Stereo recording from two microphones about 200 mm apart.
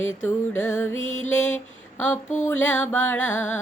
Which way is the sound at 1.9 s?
10° left (ahead or behind).